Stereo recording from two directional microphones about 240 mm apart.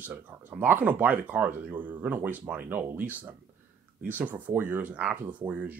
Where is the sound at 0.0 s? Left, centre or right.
Centre.